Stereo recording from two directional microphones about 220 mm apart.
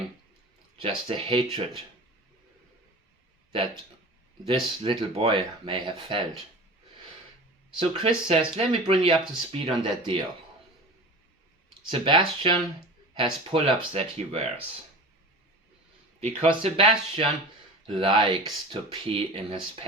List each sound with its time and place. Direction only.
0.8 s speech: 25° right (ahead or behind)
4.4 s speech: 25° right (ahead or behind)
7.8 s speech: 25° right (ahead or behind)
11.9 s speech: 20° right (ahead or behind)
16.2 s speech: 30° right (ahead or behind)